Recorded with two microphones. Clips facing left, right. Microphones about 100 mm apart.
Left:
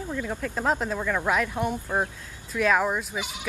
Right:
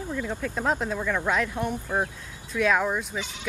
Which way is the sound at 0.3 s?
Centre (ahead or behind).